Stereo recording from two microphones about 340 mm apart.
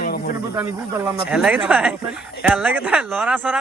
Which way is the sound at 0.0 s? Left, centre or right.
Left.